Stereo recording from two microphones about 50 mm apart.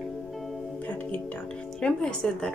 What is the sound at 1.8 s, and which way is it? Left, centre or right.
Speech, left.